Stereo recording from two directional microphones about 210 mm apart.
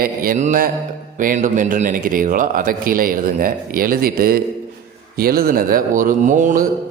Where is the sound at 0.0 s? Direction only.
45° right (ahead or behind).